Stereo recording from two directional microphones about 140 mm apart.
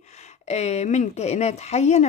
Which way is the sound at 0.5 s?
55° left (ahead or behind).